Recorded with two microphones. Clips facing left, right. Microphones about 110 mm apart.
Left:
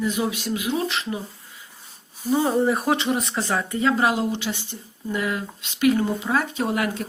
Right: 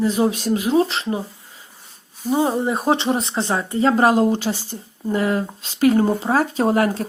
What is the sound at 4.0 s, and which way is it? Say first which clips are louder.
Speech: right 6 dB; 40° right (ahead or behind).